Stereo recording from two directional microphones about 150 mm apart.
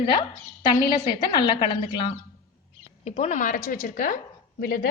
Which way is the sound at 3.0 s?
50° left (ahead or behind).